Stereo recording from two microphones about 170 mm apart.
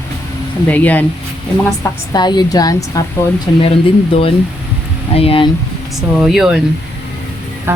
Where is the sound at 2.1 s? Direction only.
25° left (ahead or behind).